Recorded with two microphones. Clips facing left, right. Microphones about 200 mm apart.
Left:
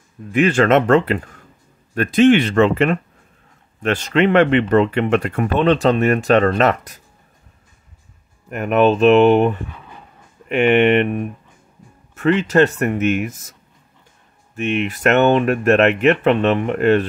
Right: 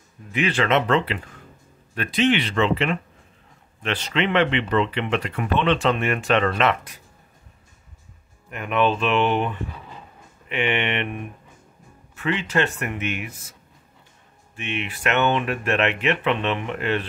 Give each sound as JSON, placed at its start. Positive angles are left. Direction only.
{"t": 0.3, "sound": "speech", "side_deg": 45}
{"t": 8.5, "sound": "speech", "side_deg": 45}